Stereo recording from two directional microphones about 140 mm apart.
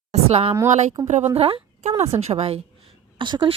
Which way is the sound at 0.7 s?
60° right (ahead or behind).